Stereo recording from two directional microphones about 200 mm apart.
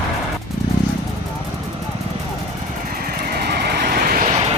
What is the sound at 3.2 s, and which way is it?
Vehicle, 50° right (ahead or behind).